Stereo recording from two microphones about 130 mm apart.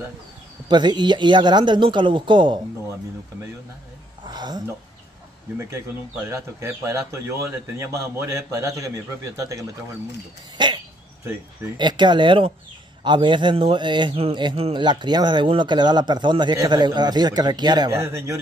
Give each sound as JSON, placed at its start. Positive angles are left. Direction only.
{"t": 0.7, "sound": "speech", "side_deg": -35}
{"t": 4.2, "sound": "a sound", "side_deg": -35}
{"t": 6.3, "sound": "a man's voice", "side_deg": -20}
{"t": 10.6, "sound": "a sound", "side_deg": -35}
{"t": 11.7, "sound": "speech", "side_deg": -35}
{"t": 18.0, "sound": "a man's voice", "side_deg": -20}